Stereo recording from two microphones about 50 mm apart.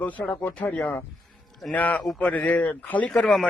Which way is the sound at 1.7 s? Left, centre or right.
Left.